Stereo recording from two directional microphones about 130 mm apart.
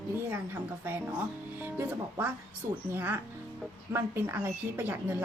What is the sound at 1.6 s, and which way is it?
A woman's voice, 15° right (ahead or behind).